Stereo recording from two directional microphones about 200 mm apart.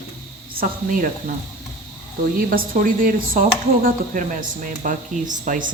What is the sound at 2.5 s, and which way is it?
Speech, 45° right (ahead or behind).